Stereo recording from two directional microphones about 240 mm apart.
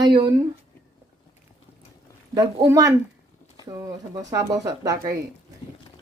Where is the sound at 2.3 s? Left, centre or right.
Centre.